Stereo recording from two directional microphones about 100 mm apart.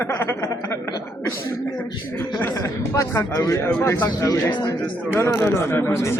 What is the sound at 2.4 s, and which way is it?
A man's voice, 30° left (ahead or behind).